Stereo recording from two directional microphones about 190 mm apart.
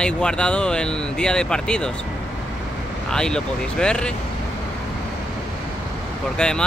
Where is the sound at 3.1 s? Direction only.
5° left (ahead or behind).